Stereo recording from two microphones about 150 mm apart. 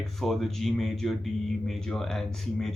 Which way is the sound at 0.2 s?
Centre (ahead or behind).